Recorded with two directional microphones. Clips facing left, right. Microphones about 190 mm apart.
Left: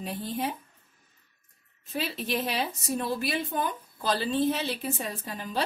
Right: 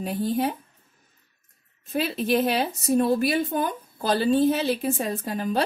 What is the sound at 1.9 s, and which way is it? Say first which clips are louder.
A woman's voice: right 7 dB; 50° right (ahead or behind).